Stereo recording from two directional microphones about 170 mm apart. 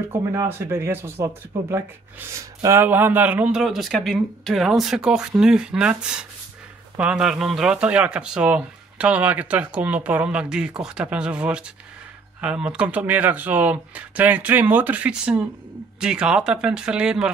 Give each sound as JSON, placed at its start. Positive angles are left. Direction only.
{"t": 0.1, "sound": "speech", "side_deg": -15}